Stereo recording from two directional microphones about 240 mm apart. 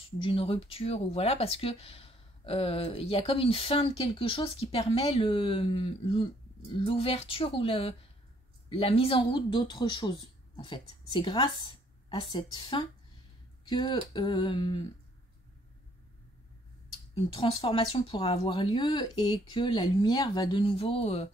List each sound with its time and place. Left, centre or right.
0.2 s speech: left
17.1 s speech: left